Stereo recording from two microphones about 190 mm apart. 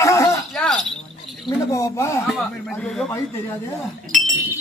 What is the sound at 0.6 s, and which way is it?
Cricket, centre (ahead or behind).